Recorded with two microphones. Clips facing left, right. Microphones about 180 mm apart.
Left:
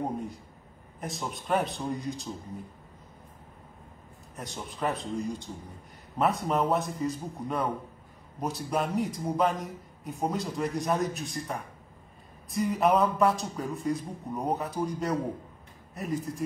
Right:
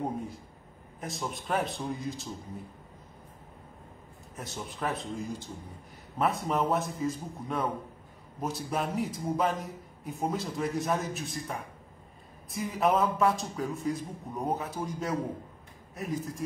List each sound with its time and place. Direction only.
0.0 s a man's voice: centre (ahead or behind)
4.4 s a man's voice: centre (ahead or behind)